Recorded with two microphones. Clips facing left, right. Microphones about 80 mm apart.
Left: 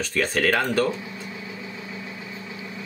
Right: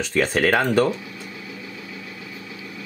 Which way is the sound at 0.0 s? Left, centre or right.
Right.